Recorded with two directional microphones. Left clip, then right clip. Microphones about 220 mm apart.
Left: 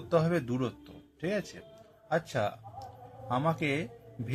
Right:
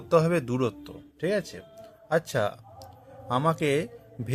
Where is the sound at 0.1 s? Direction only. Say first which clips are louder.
Right 6 dB; 40° right (ahead or behind).